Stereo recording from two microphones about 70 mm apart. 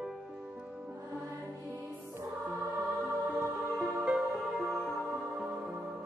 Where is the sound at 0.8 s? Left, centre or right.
Right.